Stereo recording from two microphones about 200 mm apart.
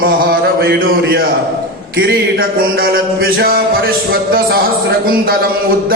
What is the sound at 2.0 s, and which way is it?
Music, 50° right (ahead or behind).